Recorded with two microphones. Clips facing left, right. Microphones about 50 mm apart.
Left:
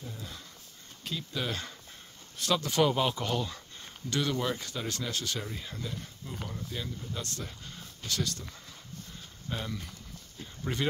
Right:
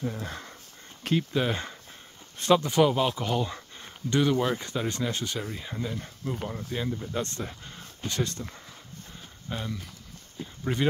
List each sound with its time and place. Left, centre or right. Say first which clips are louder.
0.0 s speech: right 10 dB; right
1.3 s speech: right 7 dB; right
2.8 s speech: right 4 dB; centre
3.4 s speech: right 4 dB; right
9.5 s speech: right 2 dB; centre